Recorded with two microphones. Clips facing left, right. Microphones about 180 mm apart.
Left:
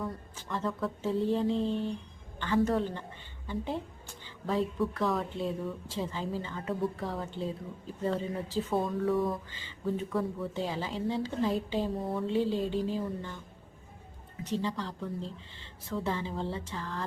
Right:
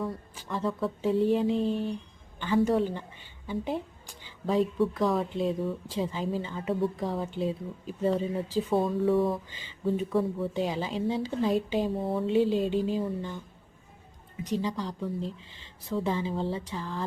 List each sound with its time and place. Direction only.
0.3 s speech: 10° right (ahead or behind)
3.4 s a sound: 15° right (ahead or behind)
4.9 s speech: 15° right (ahead or behind)
8.7 s speech: centre (ahead or behind)
9.0 s speech: 30° right (ahead or behind)
9.5 s speech: 15° right (ahead or behind)
12.0 s speech: 25° right (ahead or behind)
14.4 s speech: 15° right (ahead or behind)